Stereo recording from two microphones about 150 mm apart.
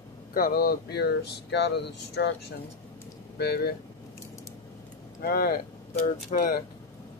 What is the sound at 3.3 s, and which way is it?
Speech, 90° left.